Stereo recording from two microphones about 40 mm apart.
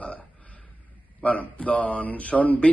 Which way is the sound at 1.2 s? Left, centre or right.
Left.